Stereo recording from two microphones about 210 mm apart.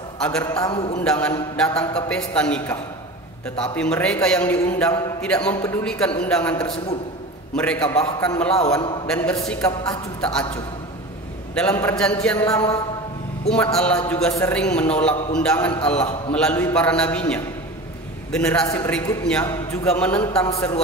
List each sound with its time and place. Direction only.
0.2 s a man's voice: 5° left (ahead or behind)
0.7 s a man's voice: 25° left (ahead or behind)
1.0 s a man's voice: 5° left (ahead or behind)
11.5 s a man's voice: 5° left (ahead or behind)
12.4 s a man's voice: 15° left (ahead or behind)
13.5 s a man's voice: 5° left (ahead or behind)